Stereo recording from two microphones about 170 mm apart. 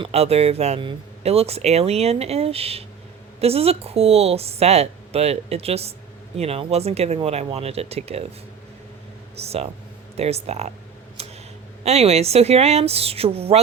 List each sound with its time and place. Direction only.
0.0 s speech: 35° right (ahead or behind)
9.3 s speech: 35° right (ahead or behind)
11.2 s a sound: 35° right (ahead or behind)
11.8 s speech: 40° right (ahead or behind)